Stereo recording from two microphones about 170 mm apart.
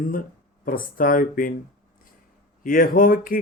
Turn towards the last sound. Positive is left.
turn(degrees=55)  # may be behind; listen again after turning